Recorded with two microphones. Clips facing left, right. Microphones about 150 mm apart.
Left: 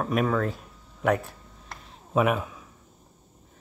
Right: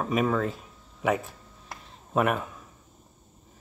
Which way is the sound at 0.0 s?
Centre (ahead or behind).